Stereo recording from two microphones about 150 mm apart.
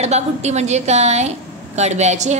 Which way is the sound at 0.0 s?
45° right (ahead or behind).